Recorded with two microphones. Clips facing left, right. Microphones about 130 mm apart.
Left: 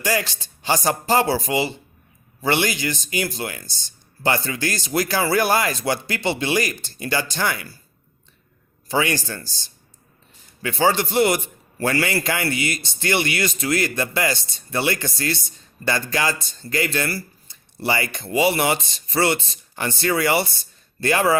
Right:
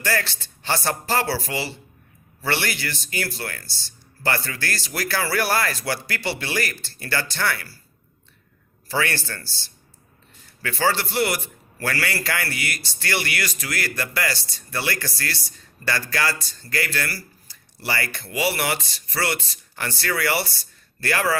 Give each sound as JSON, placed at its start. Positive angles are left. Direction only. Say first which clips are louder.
{"t": 0.0, "sound": "speech", "louder": "left 2 dB", "side_deg": 15}
{"t": 8.9, "sound": "a man's voice", "louder": "left 3 dB", "side_deg": 15}